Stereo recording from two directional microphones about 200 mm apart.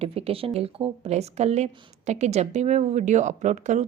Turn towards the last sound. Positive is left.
turn(degrees=-35)  # may be behind; listen again after turning